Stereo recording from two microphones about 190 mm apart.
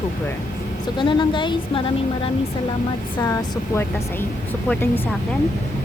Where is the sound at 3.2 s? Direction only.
15° left (ahead or behind).